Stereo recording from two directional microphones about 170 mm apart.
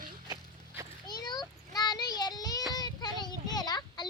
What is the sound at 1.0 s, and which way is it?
Child singing, 25° left (ahead or behind).